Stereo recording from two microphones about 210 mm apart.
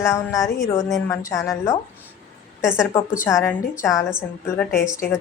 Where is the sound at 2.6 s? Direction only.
5° right (ahead or behind).